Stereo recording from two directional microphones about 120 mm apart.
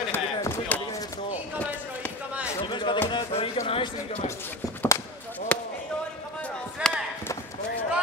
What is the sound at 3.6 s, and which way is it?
Speech, 50° left (ahead or behind).